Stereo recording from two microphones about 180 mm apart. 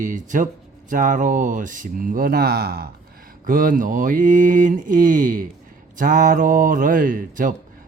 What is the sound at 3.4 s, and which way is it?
Speech, 50° right (ahead or behind).